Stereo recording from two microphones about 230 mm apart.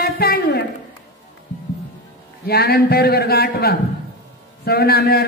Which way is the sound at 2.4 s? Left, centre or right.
Left.